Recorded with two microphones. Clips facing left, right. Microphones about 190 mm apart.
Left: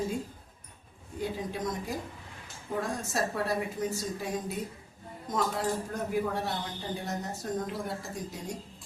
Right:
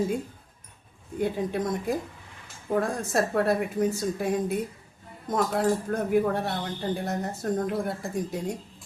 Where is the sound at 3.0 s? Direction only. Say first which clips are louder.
Right 6 dB; 55° right (ahead or behind).